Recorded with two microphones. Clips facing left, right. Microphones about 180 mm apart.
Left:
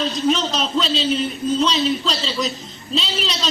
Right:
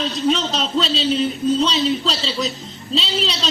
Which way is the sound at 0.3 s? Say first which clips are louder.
Right 1 dB; 30° right (ahead or behind).